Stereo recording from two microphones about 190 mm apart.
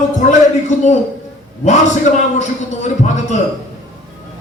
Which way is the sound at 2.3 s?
40° left (ahead or behind).